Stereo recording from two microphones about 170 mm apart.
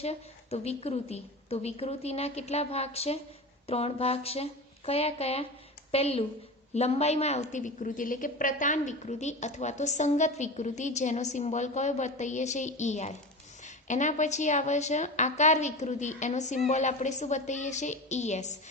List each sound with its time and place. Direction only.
0.0 s a woman's voice: 40° left (ahead or behind)